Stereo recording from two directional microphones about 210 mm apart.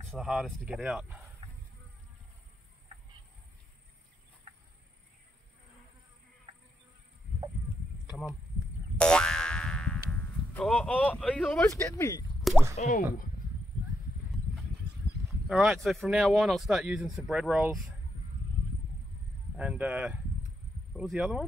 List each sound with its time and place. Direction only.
0.1 s speech: centre (ahead or behind)
8.1 s speech: centre (ahead or behind)
8.9 s boing: 5° left (ahead or behind)
10.5 s speech: 5° left (ahead or behind)
12.7 s speech: 35° left (ahead or behind)
15.4 s speech: centre (ahead or behind)
19.5 s speech: 5° right (ahead or behind)